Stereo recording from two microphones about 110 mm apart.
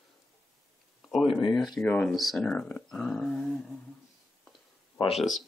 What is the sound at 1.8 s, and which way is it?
Speech, 10° left (ahead or behind).